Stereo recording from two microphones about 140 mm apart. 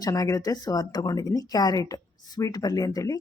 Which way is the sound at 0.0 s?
25° left (ahead or behind).